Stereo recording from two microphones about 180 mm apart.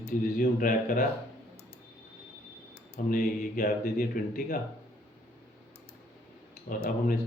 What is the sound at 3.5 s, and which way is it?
Speech, 50° left (ahead or behind).